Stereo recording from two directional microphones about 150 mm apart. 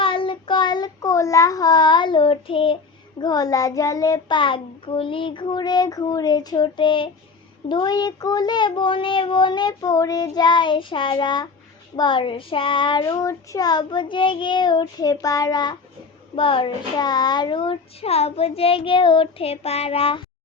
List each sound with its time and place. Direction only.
0.0 s child singing: 35° left (ahead or behind)
3.2 s child singing: 25° left (ahead or behind)
7.7 s a child's voice: 25° left (ahead or behind)